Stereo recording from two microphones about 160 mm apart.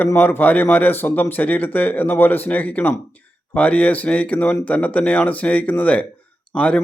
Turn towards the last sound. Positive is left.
turn(degrees=10)  # may be behind; listen again after turning